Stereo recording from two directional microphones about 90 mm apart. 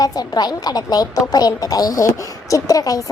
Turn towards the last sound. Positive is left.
turn(degrees=40)  # may be behind; listen again after turning